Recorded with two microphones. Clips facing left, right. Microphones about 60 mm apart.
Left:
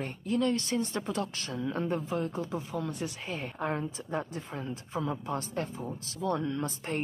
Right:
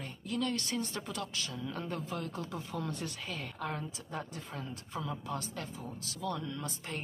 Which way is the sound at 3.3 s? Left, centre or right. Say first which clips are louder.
Left 6 dB; left.